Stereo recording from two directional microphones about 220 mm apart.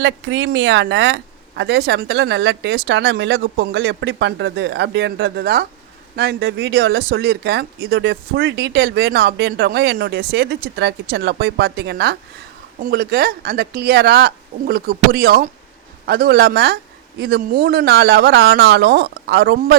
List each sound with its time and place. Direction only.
0.0 s speech: 55° right (ahead or behind)